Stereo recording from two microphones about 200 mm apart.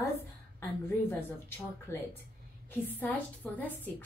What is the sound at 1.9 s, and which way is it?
A woman's voice, 10° left (ahead or behind).